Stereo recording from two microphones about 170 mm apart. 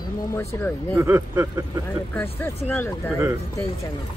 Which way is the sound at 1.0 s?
15° right (ahead or behind).